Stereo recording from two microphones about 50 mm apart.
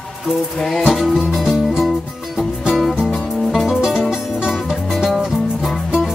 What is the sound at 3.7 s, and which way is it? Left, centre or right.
Music, centre.